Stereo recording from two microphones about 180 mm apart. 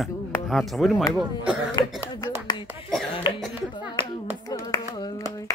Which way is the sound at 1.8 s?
20° left (ahead or behind).